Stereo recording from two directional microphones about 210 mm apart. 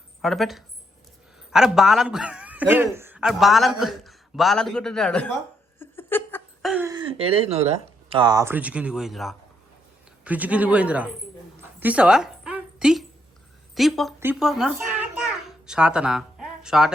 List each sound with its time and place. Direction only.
0.2 s a man's voice: centre (ahead or behind)
5.8 s a sound: 10° left (ahead or behind)
6.8 s speech: 20° right (ahead or behind)
11.8 s a sound: 5° right (ahead or behind)
13.7 s a man's voice: centre (ahead or behind)
14.2 s babbling: 5° right (ahead or behind)